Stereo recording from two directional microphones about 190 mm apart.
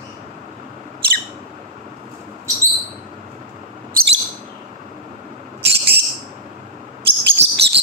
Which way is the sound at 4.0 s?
50° right (ahead or behind).